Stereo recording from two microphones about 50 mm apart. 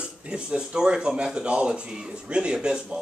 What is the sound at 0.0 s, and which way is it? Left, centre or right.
Speech, centre.